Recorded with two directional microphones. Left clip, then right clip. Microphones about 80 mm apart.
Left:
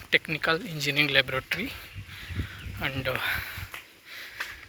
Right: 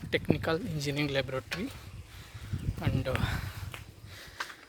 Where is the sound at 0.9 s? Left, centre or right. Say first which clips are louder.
Left 9 dB; centre.